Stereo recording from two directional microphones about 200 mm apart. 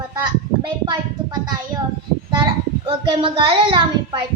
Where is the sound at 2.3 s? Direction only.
25° right (ahead or behind).